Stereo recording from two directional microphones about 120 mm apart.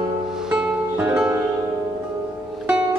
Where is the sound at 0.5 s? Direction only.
15° right (ahead or behind).